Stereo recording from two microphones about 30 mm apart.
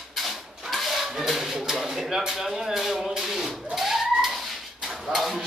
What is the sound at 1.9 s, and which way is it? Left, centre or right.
Speech, centre.